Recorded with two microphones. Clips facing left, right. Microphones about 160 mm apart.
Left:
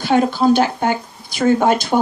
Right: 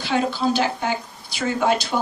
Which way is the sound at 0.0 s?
50° left (ahead or behind).